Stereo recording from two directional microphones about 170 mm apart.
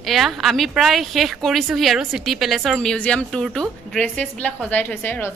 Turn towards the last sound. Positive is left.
turn(degrees=10)  # may be behind; listen again after turning